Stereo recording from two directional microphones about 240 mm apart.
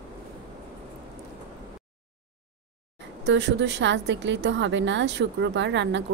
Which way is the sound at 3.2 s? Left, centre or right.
Right.